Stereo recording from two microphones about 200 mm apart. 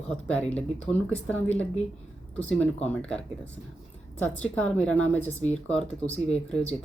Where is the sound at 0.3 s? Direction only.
5° left (ahead or behind).